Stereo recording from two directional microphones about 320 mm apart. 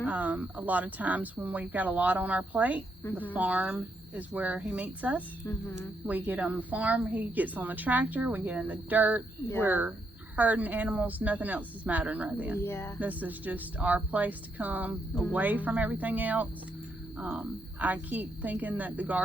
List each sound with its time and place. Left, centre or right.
0.0 s a woman's voice: centre
12.5 s speech: centre
13.0 s a woman's voice: centre